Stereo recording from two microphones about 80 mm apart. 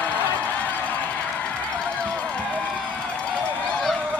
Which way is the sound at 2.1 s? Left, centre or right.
Centre.